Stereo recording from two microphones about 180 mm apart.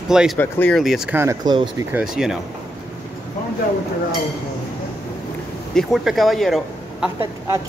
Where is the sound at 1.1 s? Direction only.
20° right (ahead or behind).